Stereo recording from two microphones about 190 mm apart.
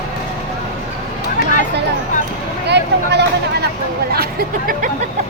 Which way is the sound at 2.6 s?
60° right (ahead or behind).